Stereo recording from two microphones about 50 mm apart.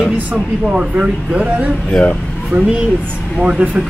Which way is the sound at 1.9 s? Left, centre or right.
Left.